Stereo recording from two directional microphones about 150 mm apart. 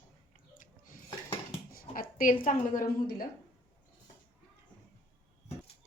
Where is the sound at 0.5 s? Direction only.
60° left (ahead or behind).